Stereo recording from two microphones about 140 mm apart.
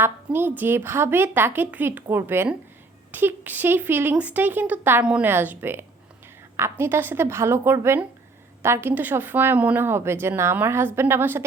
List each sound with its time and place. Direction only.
0.0 s speech: 15° right (ahead or behind)